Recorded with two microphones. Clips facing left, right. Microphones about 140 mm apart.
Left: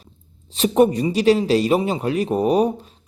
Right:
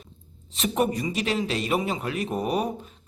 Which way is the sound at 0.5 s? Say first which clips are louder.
Left 9 dB; 35° left (ahead or behind).